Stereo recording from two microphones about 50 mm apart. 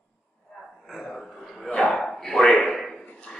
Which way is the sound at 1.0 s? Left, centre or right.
Centre.